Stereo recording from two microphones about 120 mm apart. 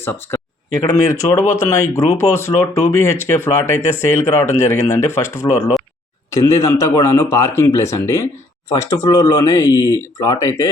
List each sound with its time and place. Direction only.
0.0 s speech: 20° left (ahead or behind)